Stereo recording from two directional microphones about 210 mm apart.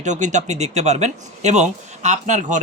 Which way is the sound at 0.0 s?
35° right (ahead or behind).